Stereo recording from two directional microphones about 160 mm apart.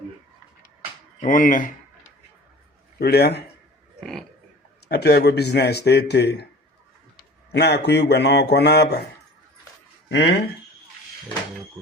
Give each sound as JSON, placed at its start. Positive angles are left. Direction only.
{"t": 1.2, "sound": "speech", "side_deg": 55}
{"t": 3.0, "sound": "speech", "side_deg": 90}
{"t": 4.0, "sound": "speech", "side_deg": 0}
{"t": 4.9, "sound": "speech", "side_deg": 90}
{"t": 7.5, "sound": "speech", "side_deg": 90}
{"t": 10.1, "sound": "speech", "side_deg": 90}